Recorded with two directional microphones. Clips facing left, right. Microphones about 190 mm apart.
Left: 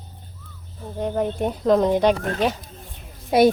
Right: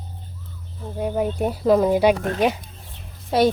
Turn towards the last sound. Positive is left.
turn(degrees=10)  # may be behind; listen again after turning